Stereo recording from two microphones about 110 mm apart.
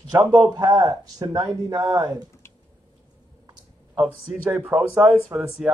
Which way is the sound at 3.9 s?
20° right (ahead or behind).